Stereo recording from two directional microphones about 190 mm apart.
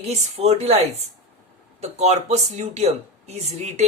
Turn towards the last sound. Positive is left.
turn(degrees=-35)  # may be behind; listen again after turning